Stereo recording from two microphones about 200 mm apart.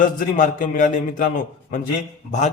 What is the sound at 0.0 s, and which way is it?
A man's voice, 40° left (ahead or behind).